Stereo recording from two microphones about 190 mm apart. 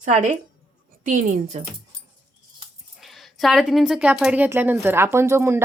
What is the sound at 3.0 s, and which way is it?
A woman's voice, centre (ahead or behind).